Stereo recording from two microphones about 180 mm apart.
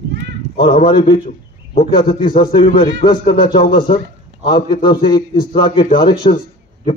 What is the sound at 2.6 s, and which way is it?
A man's voice, 50° left (ahead or behind).